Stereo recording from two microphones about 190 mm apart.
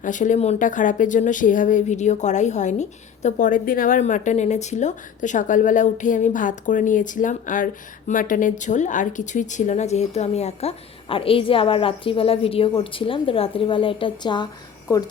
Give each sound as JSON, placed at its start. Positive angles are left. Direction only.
{"t": 0.0, "sound": "speech", "side_deg": 40}